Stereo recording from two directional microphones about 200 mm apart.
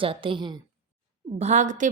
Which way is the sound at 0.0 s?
25° right (ahead or behind).